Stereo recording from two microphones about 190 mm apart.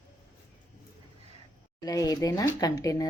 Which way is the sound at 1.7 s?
20° left (ahead or behind).